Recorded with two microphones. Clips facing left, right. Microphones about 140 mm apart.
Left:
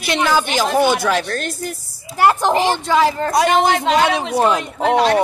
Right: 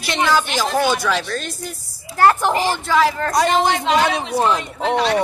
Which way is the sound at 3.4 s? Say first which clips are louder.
Left 3 dB; 50° left (ahead or behind).